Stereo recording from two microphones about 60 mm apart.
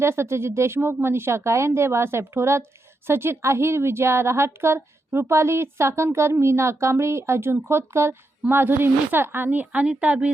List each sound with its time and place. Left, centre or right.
0.0 s a woman's voice: right
9.8 s speech: centre